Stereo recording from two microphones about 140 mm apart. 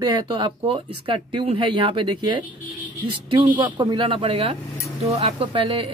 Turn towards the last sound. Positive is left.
turn(degrees=-45)  # may be behind; listen again after turning